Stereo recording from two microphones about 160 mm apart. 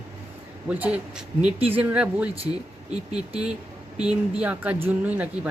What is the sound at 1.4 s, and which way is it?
Speech, 35° right (ahead or behind).